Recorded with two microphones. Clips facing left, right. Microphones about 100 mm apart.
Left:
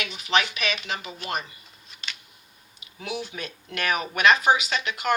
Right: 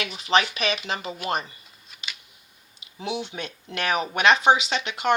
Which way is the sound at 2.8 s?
25° right (ahead or behind).